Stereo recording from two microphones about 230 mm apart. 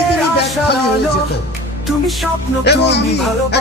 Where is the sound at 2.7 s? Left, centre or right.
Left.